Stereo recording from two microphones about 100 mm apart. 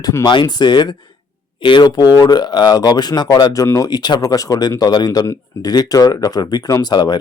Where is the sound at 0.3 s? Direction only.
45° left (ahead or behind).